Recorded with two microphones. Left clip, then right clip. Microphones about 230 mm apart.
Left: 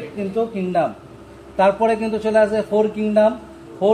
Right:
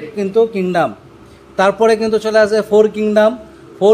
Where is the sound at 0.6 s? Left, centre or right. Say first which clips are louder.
Right 4 dB; centre.